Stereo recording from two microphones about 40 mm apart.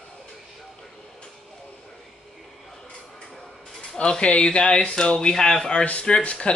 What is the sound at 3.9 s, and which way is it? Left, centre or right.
Speech, left.